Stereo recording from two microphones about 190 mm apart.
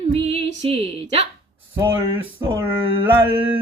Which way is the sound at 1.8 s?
10° right (ahead or behind).